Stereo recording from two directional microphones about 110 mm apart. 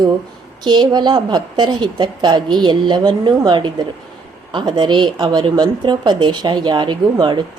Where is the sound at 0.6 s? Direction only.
45° right (ahead or behind).